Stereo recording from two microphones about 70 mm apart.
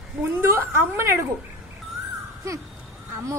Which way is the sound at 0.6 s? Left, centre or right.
Right.